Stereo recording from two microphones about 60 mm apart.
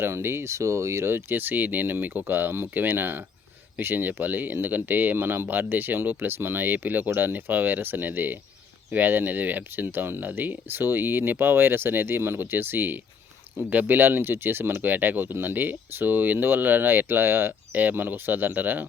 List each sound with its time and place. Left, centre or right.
0.0 s speech: right